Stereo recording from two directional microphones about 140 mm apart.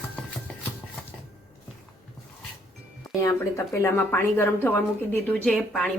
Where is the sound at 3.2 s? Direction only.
20° left (ahead or behind).